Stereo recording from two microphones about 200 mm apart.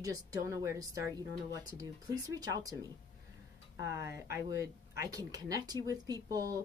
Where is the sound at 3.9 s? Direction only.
15° right (ahead or behind).